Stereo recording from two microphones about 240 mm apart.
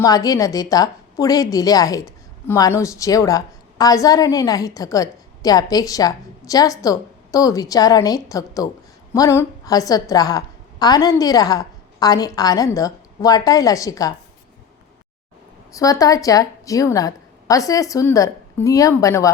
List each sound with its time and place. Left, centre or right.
0.0 s a woman's voice: centre
15.7 s a woman's voice: centre